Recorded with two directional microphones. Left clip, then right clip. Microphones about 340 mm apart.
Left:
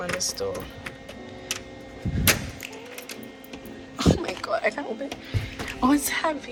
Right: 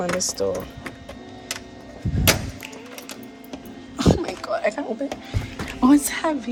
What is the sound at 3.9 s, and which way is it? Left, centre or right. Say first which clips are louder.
Cough: right 3 dB; centre.